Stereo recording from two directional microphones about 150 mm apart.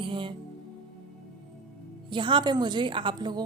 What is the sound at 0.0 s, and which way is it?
Music, 35° right (ahead or behind).